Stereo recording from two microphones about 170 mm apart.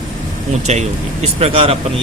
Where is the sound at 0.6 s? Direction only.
40° right (ahead or behind).